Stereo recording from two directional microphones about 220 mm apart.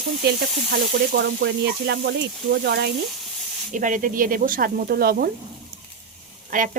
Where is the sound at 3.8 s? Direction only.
40° right (ahead or behind).